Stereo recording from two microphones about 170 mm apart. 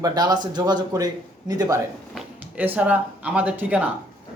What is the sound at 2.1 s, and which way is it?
Speech, 10° right (ahead or behind).